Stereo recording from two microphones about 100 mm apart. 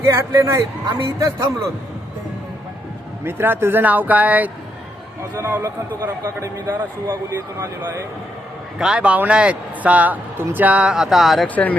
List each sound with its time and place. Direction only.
0.0 s speech: 30° right (ahead or behind)
3.2 s speech: 20° right (ahead or behind)
8.8 s speech: 10° right (ahead or behind)
11.4 s speech: 15° left (ahead or behind)